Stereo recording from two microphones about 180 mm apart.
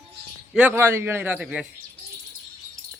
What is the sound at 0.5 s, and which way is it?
A man's voice, 10° right (ahead or behind).